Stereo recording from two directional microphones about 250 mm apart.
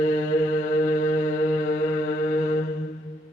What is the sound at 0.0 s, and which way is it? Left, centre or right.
Mantra, left.